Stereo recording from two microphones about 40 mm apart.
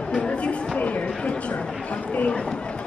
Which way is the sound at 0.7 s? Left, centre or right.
Left.